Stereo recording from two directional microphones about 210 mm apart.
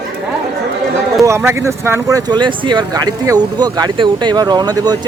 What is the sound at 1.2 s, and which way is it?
Speech, 15° right (ahead or behind).